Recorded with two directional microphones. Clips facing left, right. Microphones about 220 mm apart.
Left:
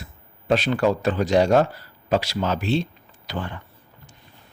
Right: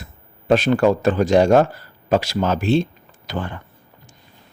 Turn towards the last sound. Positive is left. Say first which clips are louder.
# right 3 dB
turn(degrees=-45)  # may be behind; listen again after turning